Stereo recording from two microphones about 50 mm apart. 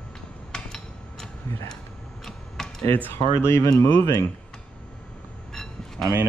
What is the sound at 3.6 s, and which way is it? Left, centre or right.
Speech, left.